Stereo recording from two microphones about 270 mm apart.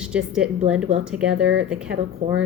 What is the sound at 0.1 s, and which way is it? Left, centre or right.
A woman's voice, centre.